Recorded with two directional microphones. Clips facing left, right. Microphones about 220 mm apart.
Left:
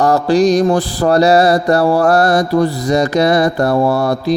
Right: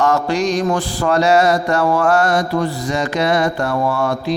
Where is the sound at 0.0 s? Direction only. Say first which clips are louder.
Left 5 dB; 35° left (ahead or behind).